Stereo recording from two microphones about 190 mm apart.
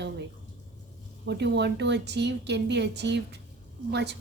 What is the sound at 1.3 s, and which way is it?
A woman's voice, 65° right (ahead or behind).